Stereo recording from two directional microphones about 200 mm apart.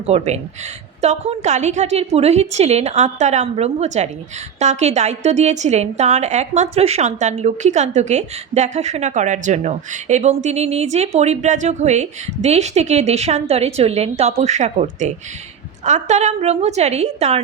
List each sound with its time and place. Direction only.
0.0 s a woman's voice: 35° right (ahead or behind)